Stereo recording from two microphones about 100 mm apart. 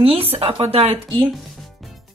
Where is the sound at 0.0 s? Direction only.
70° right (ahead or behind).